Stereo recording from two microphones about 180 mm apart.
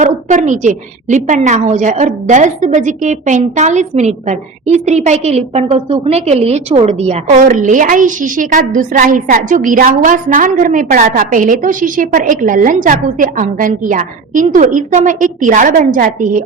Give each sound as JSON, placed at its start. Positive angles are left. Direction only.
{"t": 0.0, "sound": "a woman's voice", "side_deg": -45}